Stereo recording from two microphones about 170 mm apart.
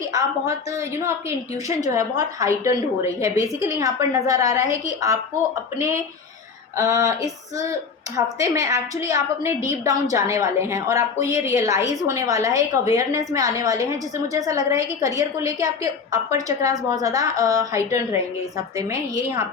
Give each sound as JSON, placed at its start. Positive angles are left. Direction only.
{"t": 0.1, "sound": "a woman's voice", "side_deg": -20}
{"t": 6.7, "sound": "a woman's voice", "side_deg": -20}